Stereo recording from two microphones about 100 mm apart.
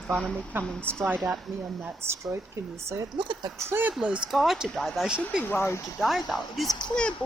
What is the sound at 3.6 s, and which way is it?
Speech, 20° right (ahead or behind).